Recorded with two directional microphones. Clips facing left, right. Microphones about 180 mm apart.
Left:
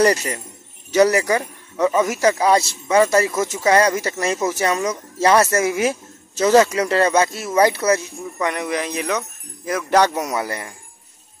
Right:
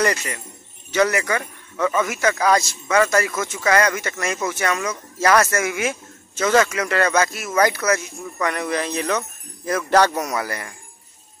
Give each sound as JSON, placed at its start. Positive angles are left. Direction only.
{"t": 0.0, "sound": "speech", "side_deg": 35}
{"t": 2.0, "sound": "speech", "side_deg": 35}
{"t": 8.5, "sound": "jingle bell", "side_deg": 15}
{"t": 9.7, "sound": "speech", "side_deg": 15}